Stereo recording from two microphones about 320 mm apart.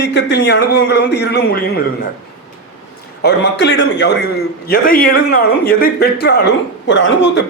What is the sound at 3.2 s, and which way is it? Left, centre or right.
A man's voice, left.